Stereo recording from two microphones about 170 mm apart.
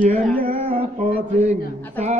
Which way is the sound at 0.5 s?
35° right (ahead or behind).